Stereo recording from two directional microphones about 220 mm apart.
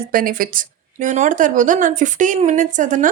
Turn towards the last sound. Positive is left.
turn(degrees=-35)  # may be behind; listen again after turning